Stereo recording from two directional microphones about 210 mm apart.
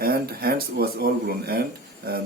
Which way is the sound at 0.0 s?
45° right (ahead or behind).